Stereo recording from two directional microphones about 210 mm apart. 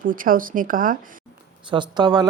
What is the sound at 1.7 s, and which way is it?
Speech, 20° right (ahead or behind).